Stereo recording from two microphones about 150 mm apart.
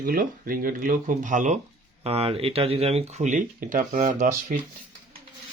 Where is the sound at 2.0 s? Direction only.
40° right (ahead or behind); by 4.5 s 60° right (ahead or behind).